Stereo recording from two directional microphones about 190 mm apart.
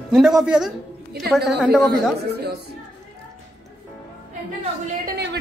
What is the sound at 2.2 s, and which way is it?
Speech, 60° right (ahead or behind).